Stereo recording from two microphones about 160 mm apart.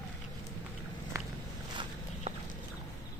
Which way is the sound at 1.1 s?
20° right (ahead or behind).